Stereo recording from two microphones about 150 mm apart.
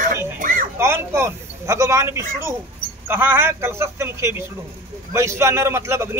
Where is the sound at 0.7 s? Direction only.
15° right (ahead or behind).